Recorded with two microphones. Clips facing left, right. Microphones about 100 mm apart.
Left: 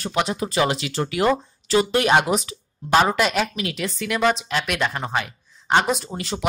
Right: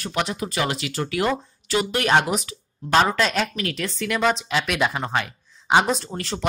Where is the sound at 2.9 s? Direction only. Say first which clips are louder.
Left 1 dB; 10° left (ahead or behind).